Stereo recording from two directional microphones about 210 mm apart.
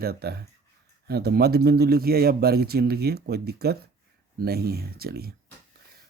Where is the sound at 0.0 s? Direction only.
50° right (ahead or behind).